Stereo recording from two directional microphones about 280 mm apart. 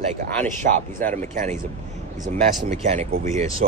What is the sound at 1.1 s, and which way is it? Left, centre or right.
Speech, right.